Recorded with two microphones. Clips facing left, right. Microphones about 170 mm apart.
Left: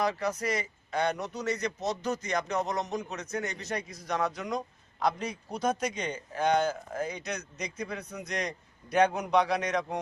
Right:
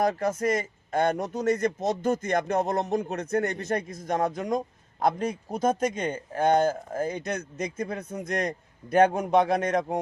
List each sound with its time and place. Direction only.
0.0 s a man's voice: 50° right (ahead or behind)